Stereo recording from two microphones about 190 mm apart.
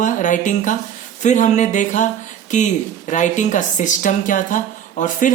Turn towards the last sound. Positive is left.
turn(degrees=40)  # may be behind; listen again after turning